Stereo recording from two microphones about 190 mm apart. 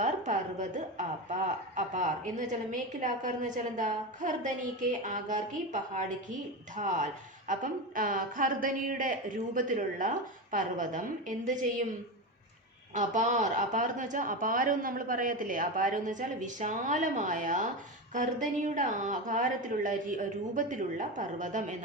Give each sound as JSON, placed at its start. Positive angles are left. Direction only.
{"t": 0.0, "sound": "a woman's voice", "side_deg": -40}
{"t": 12.9, "sound": "a woman's voice", "side_deg": -40}